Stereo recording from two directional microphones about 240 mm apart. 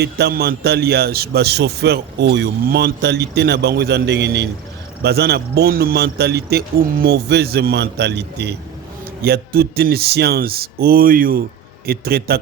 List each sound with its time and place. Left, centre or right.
0.0 s a man's voice: right